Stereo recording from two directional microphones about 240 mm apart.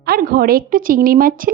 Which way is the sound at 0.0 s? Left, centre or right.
Right.